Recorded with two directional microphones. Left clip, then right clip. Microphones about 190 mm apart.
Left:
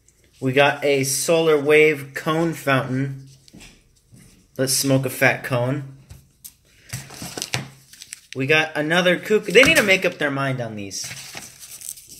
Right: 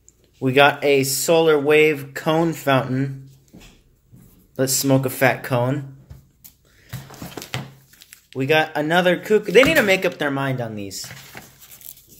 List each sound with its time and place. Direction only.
0.4 s speech: 25° right (ahead or behind)
4.6 s speech: 15° right (ahead or behind)
6.9 s a sound: 10° right (ahead or behind)
7.5 s speech: 10° right (ahead or behind)